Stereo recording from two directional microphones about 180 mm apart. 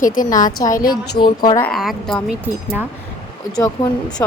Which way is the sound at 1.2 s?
25° left (ahead or behind).